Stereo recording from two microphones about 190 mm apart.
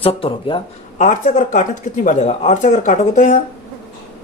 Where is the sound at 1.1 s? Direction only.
40° left (ahead or behind).